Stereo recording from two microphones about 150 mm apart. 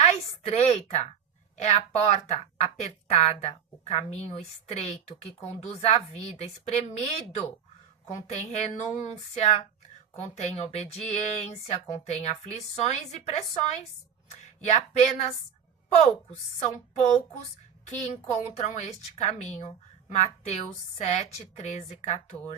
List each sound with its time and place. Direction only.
0.0 s a sound: 45° left (ahead or behind)
1.6 s a woman's voice: 45° left (ahead or behind)
16.6 s a woman's voice: 45° left (ahead or behind)